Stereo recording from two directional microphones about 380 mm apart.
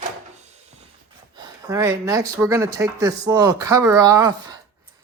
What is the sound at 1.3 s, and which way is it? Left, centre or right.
Speech, centre.